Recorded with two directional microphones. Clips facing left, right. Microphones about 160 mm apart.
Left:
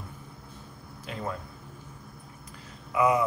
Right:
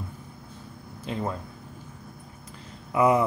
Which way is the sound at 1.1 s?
30° right (ahead or behind).